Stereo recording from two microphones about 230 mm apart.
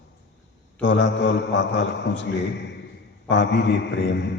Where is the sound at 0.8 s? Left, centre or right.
Left.